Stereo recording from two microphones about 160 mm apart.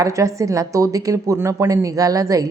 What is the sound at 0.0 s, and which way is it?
A woman's voice, 20° right (ahead or behind).